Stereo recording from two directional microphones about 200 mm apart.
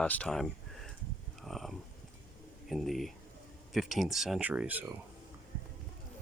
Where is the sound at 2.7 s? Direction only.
Centre (ahead or behind).